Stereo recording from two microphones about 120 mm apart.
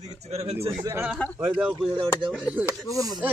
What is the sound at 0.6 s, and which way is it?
Speech, 20° right (ahead or behind).